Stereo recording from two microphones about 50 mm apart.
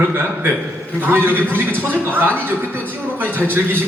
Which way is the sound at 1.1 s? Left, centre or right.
Right.